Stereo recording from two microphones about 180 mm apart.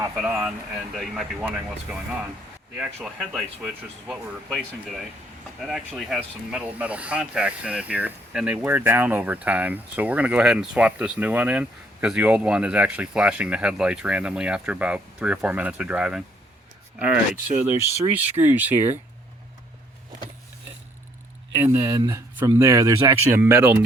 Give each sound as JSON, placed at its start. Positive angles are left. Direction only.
{"t": 0.2, "sound": "speech", "side_deg": -10}
{"t": 17.6, "sound": "speech", "side_deg": -10}
{"t": 21.7, "sound": "speech", "side_deg": -15}